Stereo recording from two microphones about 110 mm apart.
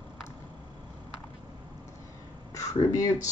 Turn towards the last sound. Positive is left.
turn(degrees=30)  # may be behind; listen again after turning